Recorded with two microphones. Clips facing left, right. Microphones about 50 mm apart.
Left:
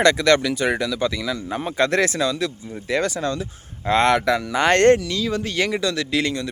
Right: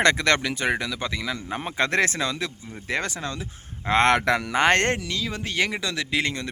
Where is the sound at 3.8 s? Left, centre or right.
Right.